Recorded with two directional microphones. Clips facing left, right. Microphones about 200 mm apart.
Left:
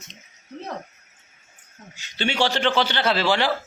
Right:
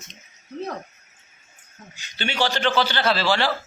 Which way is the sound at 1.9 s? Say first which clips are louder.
Left 2 dB; 25° left (ahead or behind).